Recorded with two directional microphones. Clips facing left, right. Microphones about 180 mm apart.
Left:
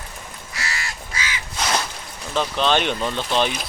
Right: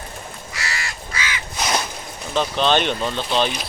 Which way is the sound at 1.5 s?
15° right (ahead or behind).